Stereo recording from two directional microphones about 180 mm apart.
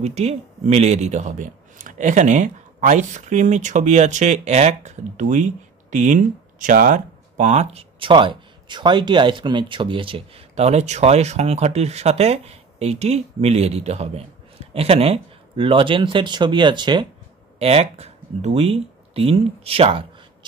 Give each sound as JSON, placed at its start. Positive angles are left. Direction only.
{"t": 0.0, "sound": "speech", "side_deg": -40}